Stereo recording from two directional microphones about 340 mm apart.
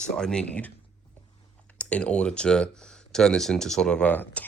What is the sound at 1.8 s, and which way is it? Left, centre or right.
Speech, centre.